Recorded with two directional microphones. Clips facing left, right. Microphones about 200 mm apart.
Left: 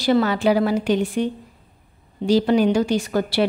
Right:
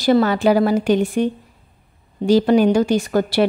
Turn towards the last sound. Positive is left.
turn(degrees=-50)  # may be behind; listen again after turning